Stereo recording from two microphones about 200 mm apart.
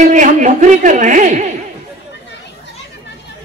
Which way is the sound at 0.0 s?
40° right (ahead or behind).